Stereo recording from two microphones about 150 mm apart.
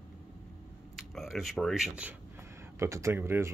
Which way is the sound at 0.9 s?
Centre (ahead or behind).